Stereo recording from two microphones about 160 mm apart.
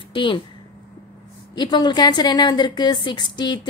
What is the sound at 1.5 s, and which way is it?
A woman's voice, 30° left (ahead or behind).